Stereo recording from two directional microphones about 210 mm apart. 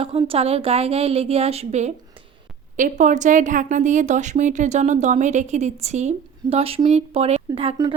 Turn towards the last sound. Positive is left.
turn(degrees=-25)  # may be behind; listen again after turning